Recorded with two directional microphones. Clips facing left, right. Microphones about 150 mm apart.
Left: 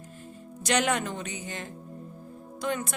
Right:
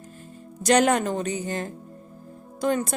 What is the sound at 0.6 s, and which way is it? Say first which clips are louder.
A woman's voice: right 7 dB; 40° right (ahead or behind).